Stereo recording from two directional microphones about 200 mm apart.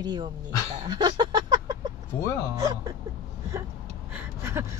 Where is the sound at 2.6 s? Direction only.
20° right (ahead or behind).